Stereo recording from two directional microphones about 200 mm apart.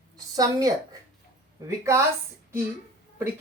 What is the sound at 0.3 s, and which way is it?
Speech, 20° right (ahead or behind).